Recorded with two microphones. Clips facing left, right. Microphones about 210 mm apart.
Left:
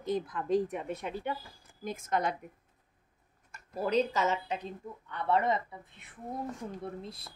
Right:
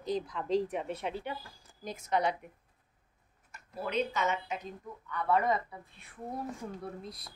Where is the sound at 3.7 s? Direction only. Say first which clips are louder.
Left 4 dB; 40° left (ahead or behind).